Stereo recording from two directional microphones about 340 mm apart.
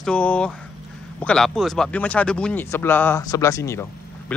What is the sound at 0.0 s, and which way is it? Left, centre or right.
Speech, centre.